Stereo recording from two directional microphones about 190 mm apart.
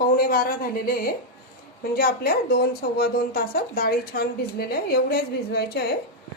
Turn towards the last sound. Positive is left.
turn(degrees=55)  # may be behind; listen again after turning